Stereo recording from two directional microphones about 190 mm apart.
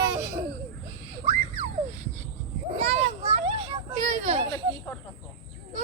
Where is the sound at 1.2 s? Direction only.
40° right (ahead or behind).